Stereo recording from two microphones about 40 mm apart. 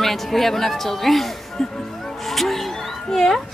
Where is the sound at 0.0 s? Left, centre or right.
Centre.